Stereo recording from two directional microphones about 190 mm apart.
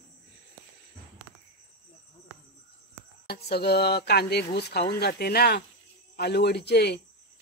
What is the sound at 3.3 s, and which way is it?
Speech, 55° left (ahead or behind).